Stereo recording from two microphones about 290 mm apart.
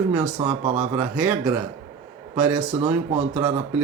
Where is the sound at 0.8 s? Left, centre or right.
Centre.